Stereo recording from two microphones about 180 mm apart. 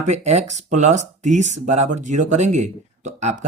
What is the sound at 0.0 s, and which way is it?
Speech, 40° right (ahead or behind).